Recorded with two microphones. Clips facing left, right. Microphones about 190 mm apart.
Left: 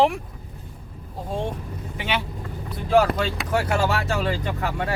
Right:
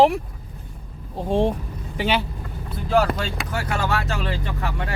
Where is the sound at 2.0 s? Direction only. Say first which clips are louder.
Right 5 dB; 35° right (ahead or behind).